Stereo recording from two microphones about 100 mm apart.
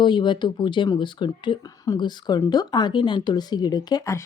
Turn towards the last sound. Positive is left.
turn(degrees=35)  # may be behind; listen again after turning